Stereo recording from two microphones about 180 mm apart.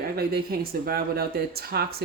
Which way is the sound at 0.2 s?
60° right (ahead or behind).